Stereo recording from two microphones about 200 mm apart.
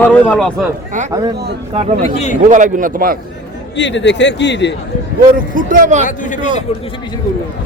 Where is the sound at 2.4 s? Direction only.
40° right (ahead or behind).